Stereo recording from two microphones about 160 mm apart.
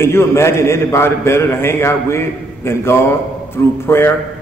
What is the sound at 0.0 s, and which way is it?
A man's voice, 15° left (ahead or behind).